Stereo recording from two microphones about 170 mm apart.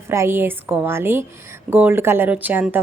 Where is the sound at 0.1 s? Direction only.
15° right (ahead or behind).